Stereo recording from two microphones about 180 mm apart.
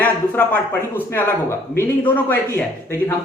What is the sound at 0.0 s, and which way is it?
Speech, 10° left (ahead or behind).